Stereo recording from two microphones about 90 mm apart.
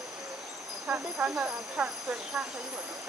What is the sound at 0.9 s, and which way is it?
Speech, 15° right (ahead or behind).